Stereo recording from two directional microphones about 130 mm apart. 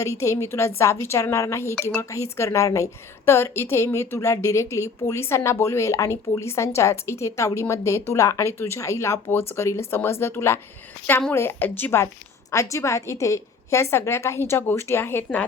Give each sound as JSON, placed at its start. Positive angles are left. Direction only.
{"t": 0.0, "sound": "a woman's voice", "side_deg": 25}